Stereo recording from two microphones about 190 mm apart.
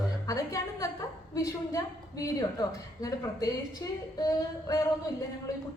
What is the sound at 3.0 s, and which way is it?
A woman's voice, 20° left (ahead or behind).